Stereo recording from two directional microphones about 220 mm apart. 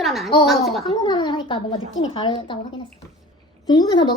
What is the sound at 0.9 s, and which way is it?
Speech, 20° left (ahead or behind).